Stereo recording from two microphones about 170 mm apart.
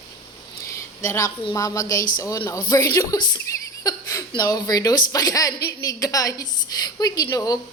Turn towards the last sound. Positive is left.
turn(degrees=20)  # may be behind; listen again after turning